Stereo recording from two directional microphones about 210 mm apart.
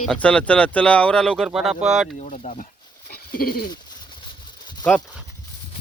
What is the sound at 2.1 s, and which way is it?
Speech, 35° left (ahead or behind).